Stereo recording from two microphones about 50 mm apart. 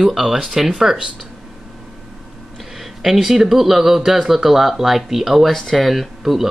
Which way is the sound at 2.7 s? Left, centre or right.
Centre.